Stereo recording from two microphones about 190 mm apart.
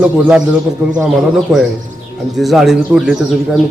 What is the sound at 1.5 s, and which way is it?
A man's voice, centre (ahead or behind).